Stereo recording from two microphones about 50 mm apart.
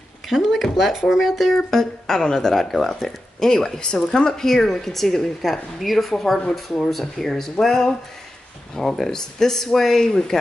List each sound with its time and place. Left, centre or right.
0.3 s speech: centre